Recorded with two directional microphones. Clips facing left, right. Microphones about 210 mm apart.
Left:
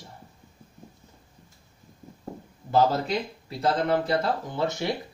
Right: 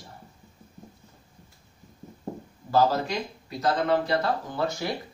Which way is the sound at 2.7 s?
25° left (ahead or behind).